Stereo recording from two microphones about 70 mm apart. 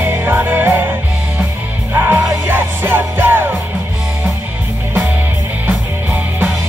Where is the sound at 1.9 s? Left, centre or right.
Right.